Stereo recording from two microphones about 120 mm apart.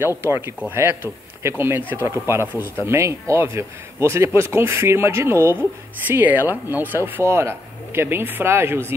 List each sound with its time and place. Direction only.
0.2 s speech: 20° right (ahead or behind)